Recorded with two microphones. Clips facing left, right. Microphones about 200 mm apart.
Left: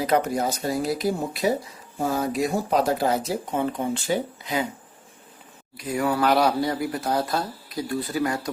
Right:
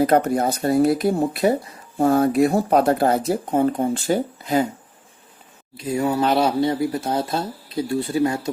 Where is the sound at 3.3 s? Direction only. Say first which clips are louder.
Right 6 dB; 45° right (ahead or behind).